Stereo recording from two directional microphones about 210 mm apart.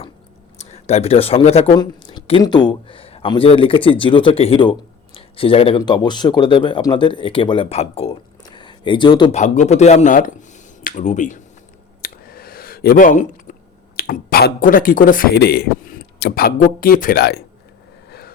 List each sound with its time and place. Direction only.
0.6 s speech: 30° left (ahead or behind)
9.3 s speech: 35° left (ahead or behind); by 17.4 s 50° left (ahead or behind)
18.1 s vehicle: 45° left (ahead or behind)